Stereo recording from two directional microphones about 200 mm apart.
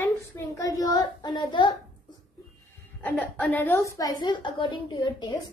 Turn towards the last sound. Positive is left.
turn(degrees=20)  # may be behind; listen again after turning